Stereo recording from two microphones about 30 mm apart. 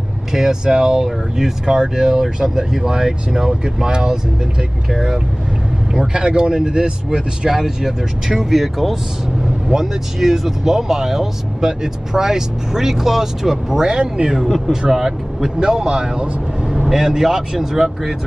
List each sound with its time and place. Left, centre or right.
0.3 s speech: centre
6.1 s speech: right
7.4 s speech: centre
9.4 s speech: centre
13.8 s speech: right
14.9 s speech: centre
15.6 s speech: right